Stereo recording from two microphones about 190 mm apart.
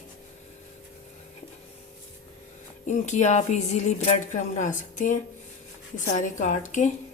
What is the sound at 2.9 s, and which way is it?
A woman's voice, 40° left (ahead or behind).